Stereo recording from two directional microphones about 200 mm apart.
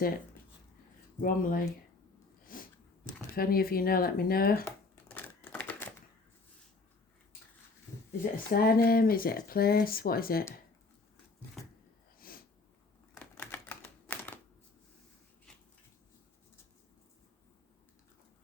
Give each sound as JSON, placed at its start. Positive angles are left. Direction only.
{"t": 1.2, "sound": "speech", "side_deg": 45}
{"t": 2.4, "sound": "sneeze", "side_deg": 45}
{"t": 3.3, "sound": "speech", "side_deg": 50}
{"t": 4.6, "sound": "crumpling", "side_deg": 10}
{"t": 8.2, "sound": "speech", "side_deg": 45}
{"t": 13.1, "sound": "typewriter", "side_deg": 10}